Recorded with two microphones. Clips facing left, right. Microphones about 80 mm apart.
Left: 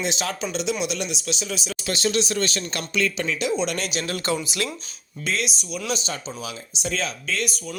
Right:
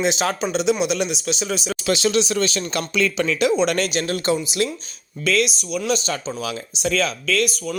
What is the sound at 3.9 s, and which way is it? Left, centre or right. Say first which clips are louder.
Speech: right 5 dB; right.